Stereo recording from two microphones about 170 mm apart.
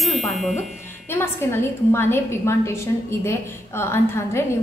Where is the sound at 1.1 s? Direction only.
15° left (ahead or behind).